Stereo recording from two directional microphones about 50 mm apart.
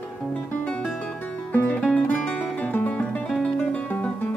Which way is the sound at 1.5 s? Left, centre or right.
Left.